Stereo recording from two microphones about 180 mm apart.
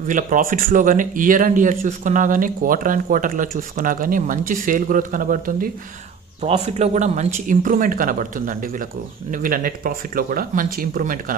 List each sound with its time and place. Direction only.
0.0 s speech: 45° right (ahead or behind)
6.4 s speech: 35° right (ahead or behind)